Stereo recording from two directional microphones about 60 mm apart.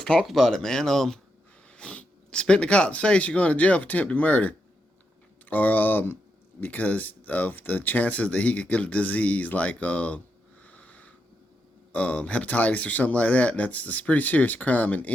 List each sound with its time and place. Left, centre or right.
0.0 s speech: centre
0.5 s speech: centre
1.7 s speech: centre
10.6 s sniff: left
11.9 s speech: left